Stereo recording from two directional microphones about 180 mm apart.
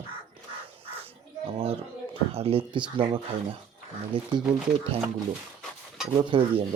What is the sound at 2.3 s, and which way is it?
Speech, 30° right (ahead or behind).